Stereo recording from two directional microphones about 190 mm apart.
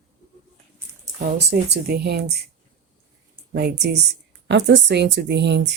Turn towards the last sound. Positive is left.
turn(degrees=-65)  # may be behind; listen again after turning